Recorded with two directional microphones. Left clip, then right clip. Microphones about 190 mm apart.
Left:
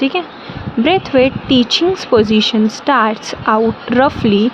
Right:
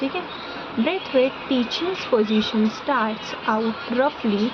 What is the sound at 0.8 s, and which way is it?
Speech, 50° left (ahead or behind).